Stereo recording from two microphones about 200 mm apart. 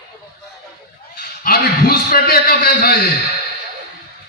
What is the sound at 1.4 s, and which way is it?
A man's voice, 50° left (ahead or behind).